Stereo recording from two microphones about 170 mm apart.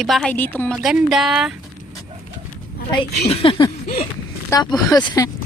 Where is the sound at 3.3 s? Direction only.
35° left (ahead or behind).